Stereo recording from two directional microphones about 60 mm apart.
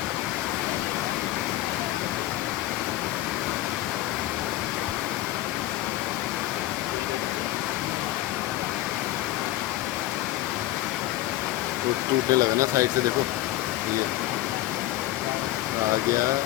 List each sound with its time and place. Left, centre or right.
12.3 s speech: right